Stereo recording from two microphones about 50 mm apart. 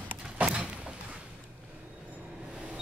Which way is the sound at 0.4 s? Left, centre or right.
Right.